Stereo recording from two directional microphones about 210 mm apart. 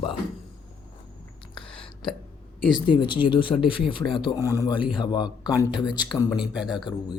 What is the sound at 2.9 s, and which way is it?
Speech, 20° left (ahead or behind).